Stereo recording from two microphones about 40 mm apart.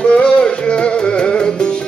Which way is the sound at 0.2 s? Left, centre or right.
Left.